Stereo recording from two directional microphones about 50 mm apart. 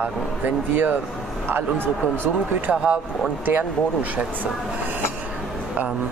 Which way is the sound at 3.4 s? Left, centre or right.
Right.